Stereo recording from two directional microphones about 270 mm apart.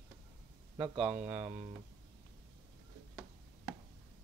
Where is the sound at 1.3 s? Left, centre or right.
Centre.